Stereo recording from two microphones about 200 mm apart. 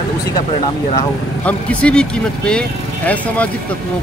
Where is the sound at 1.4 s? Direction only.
5° left (ahead or behind).